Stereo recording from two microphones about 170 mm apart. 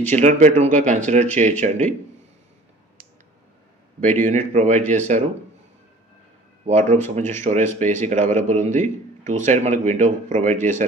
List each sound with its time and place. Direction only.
0.1 s speech: 45° right (ahead or behind)
4.0 s speech: 45° right (ahead or behind)
6.6 s speech: 45° right (ahead or behind)
8.3 s speech: 10° left (ahead or behind)
8.5 s speech: 45° right (ahead or behind)